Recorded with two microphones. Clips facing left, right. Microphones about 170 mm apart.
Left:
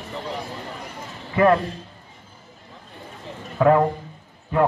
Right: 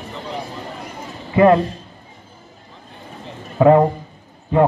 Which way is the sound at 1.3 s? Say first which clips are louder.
Right 5 dB; 20° right (ahead or behind).